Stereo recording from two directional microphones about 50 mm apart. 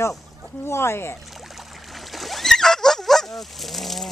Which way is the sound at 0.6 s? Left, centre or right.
Left.